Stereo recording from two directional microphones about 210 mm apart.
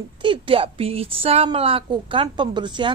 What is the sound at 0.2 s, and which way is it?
A woman's voice, 25° right (ahead or behind).